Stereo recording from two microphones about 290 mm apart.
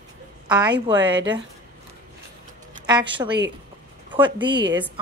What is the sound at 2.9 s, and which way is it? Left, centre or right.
A woman's voice, centre.